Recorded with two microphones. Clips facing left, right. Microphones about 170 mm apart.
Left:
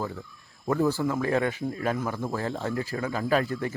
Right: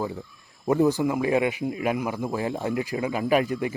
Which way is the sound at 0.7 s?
15° right (ahead or behind).